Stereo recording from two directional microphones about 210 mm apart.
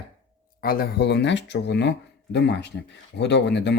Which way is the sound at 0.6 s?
45° left (ahead or behind).